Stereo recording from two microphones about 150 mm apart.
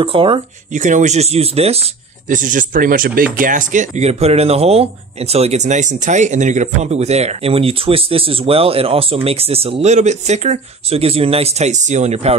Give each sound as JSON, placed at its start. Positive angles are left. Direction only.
{"t": 0.0, "sound": "speech", "side_deg": -35}
{"t": 0.7, "sound": "speech", "side_deg": -55}
{"t": 2.2, "sound": "speech", "side_deg": -60}